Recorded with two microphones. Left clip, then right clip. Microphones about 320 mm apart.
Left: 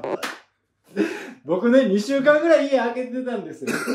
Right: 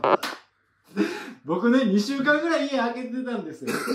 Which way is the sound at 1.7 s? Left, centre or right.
Centre.